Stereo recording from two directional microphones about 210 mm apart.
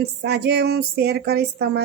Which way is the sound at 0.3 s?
50° right (ahead or behind).